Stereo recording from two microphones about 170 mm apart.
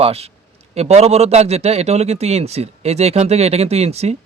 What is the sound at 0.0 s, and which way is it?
A man's voice, 35° right (ahead or behind).